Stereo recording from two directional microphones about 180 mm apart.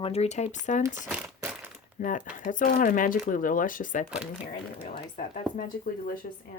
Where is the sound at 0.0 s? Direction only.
35° left (ahead or behind).